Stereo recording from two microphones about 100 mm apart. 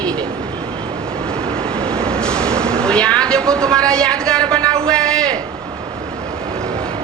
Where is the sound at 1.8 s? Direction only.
10° left (ahead or behind).